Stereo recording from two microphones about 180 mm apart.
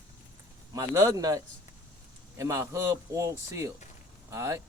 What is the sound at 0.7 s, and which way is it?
Speech, 20° right (ahead or behind).